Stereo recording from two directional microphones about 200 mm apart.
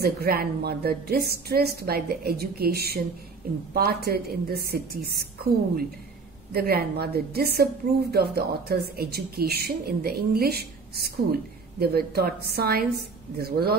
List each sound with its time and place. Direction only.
0.0 s a woman's voice: 50° right (ahead or behind)